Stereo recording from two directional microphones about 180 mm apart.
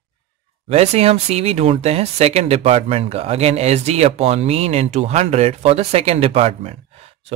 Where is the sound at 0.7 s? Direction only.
35° right (ahead or behind).